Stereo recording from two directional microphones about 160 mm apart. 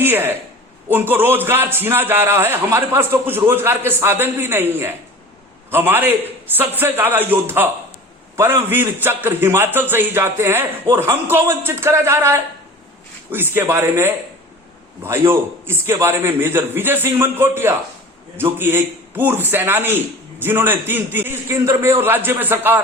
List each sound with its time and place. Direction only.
0.0 s a man's voice: 15° right (ahead or behind)